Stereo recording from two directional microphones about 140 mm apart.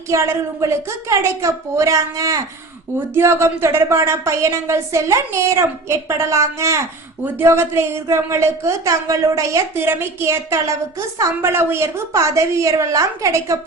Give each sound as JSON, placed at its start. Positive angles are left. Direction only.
{"t": 0.1, "sound": "speech", "side_deg": -20}